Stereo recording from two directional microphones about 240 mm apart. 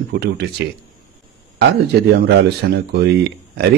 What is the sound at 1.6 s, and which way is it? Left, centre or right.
Speech, right.